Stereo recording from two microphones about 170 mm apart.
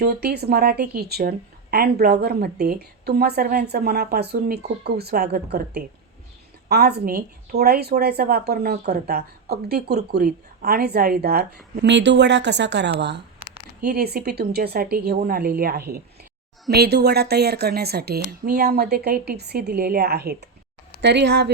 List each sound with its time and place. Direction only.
0.0 s a woman's voice: 70° right (ahead or behind); by 13.2 s 85° right
13.8 s a woman's voice: 65° right (ahead or behind)
21.0 s a woman's voice: 85° right